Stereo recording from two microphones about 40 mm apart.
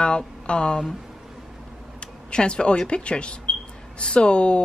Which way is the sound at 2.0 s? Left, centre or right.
Left.